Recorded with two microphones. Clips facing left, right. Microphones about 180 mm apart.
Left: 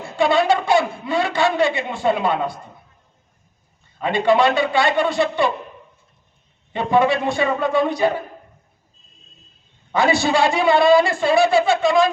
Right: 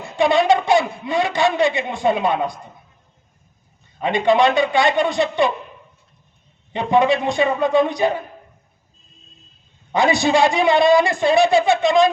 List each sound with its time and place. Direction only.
0.2 s speech: 20° right (ahead or behind)
4.0 s speech: 20° right (ahead or behind)
6.7 s speech: 15° right (ahead or behind)
9.9 s speech: 15° right (ahead or behind)